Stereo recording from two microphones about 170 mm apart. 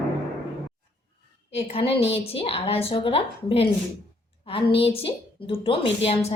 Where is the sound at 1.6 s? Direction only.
35° left (ahead or behind).